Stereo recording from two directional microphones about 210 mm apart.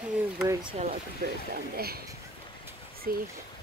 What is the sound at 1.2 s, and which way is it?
Speech, 40° right (ahead or behind).